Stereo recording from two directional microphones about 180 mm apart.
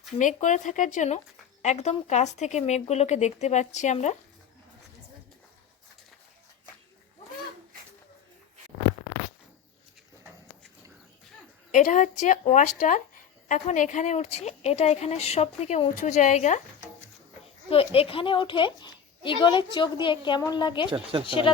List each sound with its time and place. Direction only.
0.2 s a woman's voice: 45° left (ahead or behind)
11.7 s a woman's voice: 45° left (ahead or behind)
17.7 s a woman's voice: 30° left (ahead or behind)
20.9 s speech: 30° right (ahead or behind)
21.2 s a woman's voice: 30° left (ahead or behind)